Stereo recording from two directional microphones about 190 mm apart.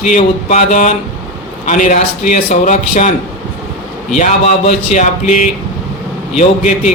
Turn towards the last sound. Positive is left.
turn(degrees=40)  # may be behind; listen again after turning